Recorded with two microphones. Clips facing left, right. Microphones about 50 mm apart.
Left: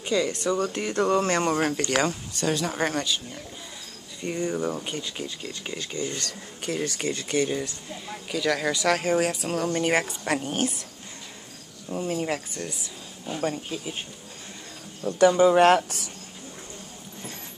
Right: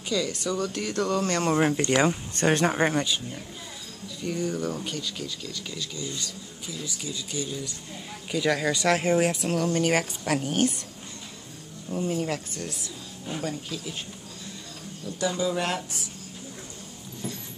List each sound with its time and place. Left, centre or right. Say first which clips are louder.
0.1 s speech: left 3 dB; left
1.5 s speech: right 2 dB; centre
2.3 s speech: right 6 dB; right
2.8 s speech: right 2 dB; centre
4.4 s speech: left 2 dB; centre; by 6.1 s left
6.1 s speech: left 2 dB; left
8.3 s a woman's voice: even; centre
11.9 s speech: even; left
13.4 s speech: left 5 dB; left
15.0 s speech: left 10 dB; left